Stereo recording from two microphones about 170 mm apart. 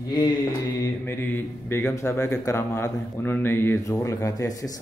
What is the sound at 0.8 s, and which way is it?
A man's voice, 15° left (ahead or behind).